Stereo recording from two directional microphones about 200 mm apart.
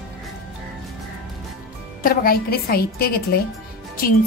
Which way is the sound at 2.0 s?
50° left (ahead or behind).